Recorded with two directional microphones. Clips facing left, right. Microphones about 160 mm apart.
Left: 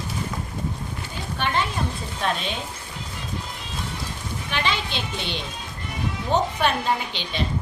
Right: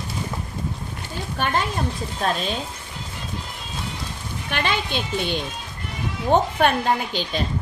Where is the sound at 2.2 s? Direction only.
40° right (ahead or behind).